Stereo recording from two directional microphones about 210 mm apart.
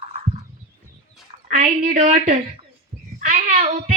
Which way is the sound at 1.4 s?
40° right (ahead or behind).